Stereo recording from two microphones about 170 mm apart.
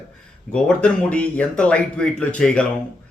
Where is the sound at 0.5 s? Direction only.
5° left (ahead or behind).